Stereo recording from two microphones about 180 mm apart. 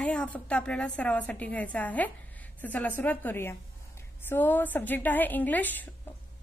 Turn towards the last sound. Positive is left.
turn(degrees=10)  # may be behind; listen again after turning